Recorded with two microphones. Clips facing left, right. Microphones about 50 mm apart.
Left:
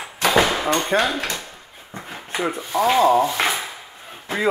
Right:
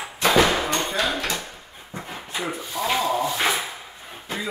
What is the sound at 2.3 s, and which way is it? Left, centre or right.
Speech, left.